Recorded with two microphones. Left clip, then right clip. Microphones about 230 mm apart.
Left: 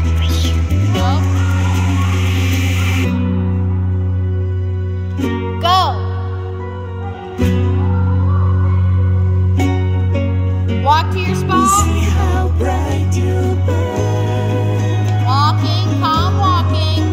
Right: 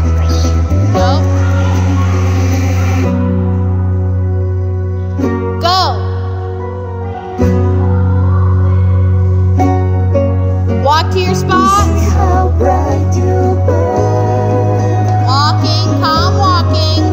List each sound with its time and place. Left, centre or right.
1.8 s music: centre
5.2 s music: centre
5.6 s music: left
7.3 s music: centre
9.6 s music: centre
10.9 s music: left
11.9 s music: centre
15.2 s music: left